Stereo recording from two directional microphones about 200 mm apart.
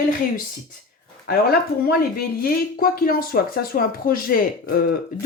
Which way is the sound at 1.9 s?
50° left (ahead or behind).